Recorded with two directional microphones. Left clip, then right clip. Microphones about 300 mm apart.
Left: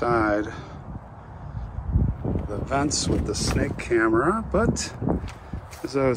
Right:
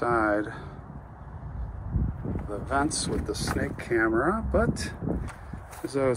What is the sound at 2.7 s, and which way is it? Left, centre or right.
Speech, centre.